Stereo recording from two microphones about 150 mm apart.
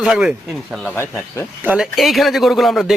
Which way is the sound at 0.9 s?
15° left (ahead or behind).